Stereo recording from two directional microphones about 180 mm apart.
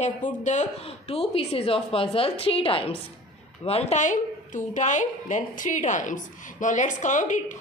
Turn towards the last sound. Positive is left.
turn(degrees=45)  # may be behind; listen again after turning